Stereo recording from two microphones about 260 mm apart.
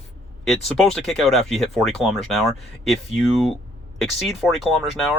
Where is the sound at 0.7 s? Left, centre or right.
Centre.